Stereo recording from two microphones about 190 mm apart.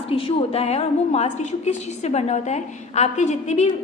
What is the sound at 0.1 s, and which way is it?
A woman's voice, 30° left (ahead or behind).